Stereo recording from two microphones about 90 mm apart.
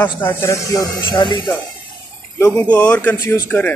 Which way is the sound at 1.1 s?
60° left (ahead or behind).